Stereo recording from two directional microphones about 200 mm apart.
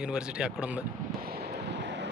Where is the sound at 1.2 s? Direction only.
50° right (ahead or behind).